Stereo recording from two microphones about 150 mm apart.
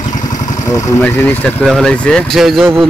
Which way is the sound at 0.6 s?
20° left (ahead or behind).